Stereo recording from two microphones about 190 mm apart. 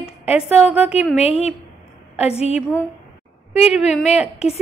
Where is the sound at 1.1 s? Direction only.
35° left (ahead or behind).